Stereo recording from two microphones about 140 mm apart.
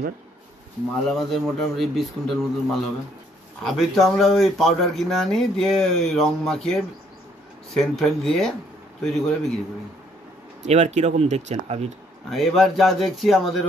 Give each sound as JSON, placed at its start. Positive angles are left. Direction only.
{"t": 1.1, "sound": "a man's voice", "side_deg": 0}
{"t": 10.6, "sound": "speech", "side_deg": -55}
{"t": 12.3, "sound": "a man's voice", "side_deg": 0}